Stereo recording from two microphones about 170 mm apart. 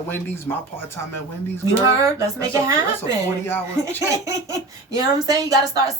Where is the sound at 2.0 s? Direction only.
20° right (ahead or behind).